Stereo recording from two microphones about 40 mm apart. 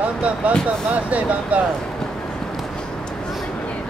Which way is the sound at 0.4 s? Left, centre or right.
Right.